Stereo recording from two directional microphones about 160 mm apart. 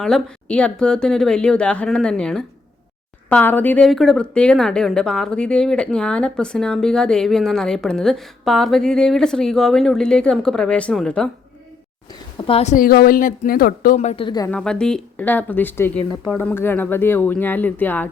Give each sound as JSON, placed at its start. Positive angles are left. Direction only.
{"t": 0.0, "sound": "a woman's voice", "side_deg": 5}
{"t": 12.5, "sound": "a woman's voice", "side_deg": 40}
{"t": 12.7, "sound": "speech", "side_deg": 65}
{"t": 14.3, "sound": "a woman's voice", "side_deg": 25}
{"t": 14.5, "sound": "speech", "side_deg": 5}